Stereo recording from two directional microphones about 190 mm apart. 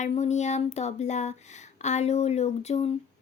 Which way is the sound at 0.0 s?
35° left (ahead or behind).